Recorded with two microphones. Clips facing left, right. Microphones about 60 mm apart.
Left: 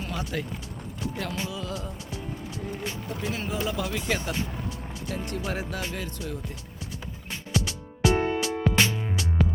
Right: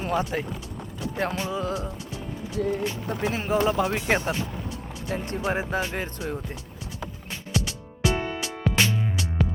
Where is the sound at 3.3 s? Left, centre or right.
Right.